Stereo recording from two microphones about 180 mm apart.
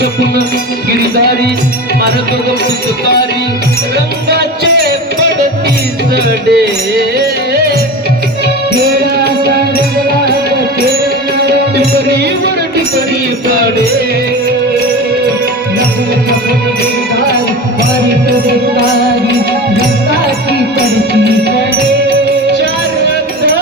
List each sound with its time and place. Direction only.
0.9 s music: 65° right (ahead or behind)
6.5 s music: 60° right (ahead or behind)
8.9 s music: 60° right (ahead or behind)
11.4 s music: 65° right (ahead or behind)
21.1 s music: 65° right (ahead or behind)